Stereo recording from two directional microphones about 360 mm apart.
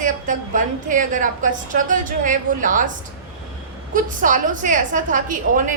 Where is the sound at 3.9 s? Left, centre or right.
Right.